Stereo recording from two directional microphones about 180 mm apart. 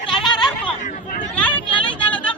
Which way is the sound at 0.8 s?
45° left (ahead or behind).